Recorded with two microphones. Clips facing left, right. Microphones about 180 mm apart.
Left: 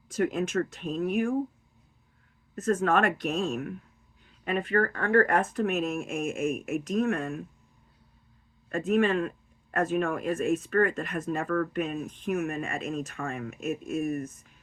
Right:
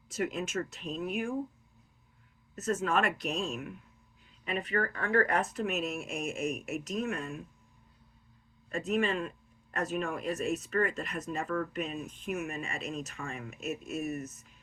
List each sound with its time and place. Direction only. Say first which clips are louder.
0.1 s speech: left 6 dB; 55° left (ahead or behind)
2.6 s speech: left 5 dB; 55° left (ahead or behind)
8.7 s speech: left 6 dB; 55° left (ahead or behind)